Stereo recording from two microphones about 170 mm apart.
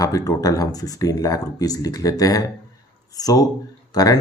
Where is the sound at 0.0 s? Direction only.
20° left (ahead or behind).